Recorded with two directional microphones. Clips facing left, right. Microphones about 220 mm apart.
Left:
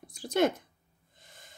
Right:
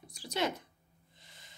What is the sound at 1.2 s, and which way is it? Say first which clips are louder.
Snort: left 5 dB; 50° left (ahead or behind).